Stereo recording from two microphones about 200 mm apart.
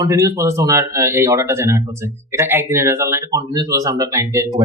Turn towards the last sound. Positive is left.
turn(degrees=-15)  # may be behind; listen again after turning